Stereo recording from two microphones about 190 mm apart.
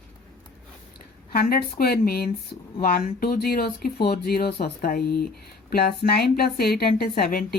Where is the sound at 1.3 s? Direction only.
50° left (ahead or behind).